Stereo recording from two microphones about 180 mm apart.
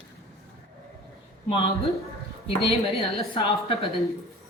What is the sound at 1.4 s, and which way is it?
Speech, 30° left (ahead or behind).